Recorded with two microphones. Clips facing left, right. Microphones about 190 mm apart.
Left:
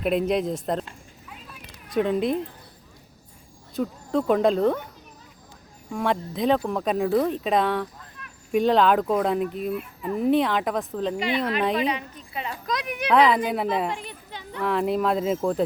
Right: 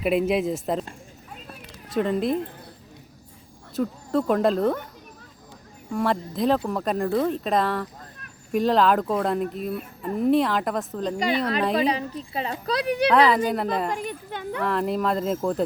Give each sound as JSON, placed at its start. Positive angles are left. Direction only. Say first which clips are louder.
{"t": 0.0, "sound": "speech", "louder": "right 1 dB", "side_deg": -5}
{"t": 0.9, "sound": "a sound", "louder": "right 3 dB", "side_deg": -45}
{"t": 2.0, "sound": "speech", "louder": "even", "side_deg": 0}
{"t": 3.8, "sound": "speech", "louder": "right 1 dB", "side_deg": 0}
{"t": 5.9, "sound": "speech", "louder": "right 1 dB", "side_deg": 0}
{"t": 11.2, "sound": "a woman's voice", "louder": "right 2 dB", "side_deg": -40}
{"t": 13.1, "sound": "speech", "louder": "left 3 dB", "side_deg": 0}
{"t": 13.9, "sound": "a child's voice", "louder": "right 5 dB", "side_deg": -45}
{"t": 14.6, "sound": "speech", "louder": "left 2 dB", "side_deg": 0}